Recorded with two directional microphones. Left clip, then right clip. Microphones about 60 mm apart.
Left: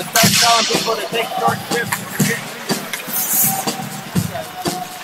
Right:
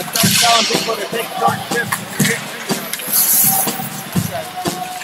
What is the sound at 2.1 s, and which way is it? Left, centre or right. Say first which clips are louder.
Music: right 2 dB; centre.